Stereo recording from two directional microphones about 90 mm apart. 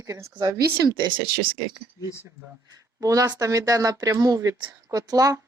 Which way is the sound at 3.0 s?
40° right (ahead or behind).